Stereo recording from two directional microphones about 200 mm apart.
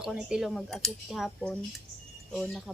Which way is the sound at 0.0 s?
5° right (ahead or behind).